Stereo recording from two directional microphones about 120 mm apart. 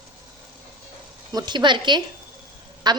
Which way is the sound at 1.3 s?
40° right (ahead or behind).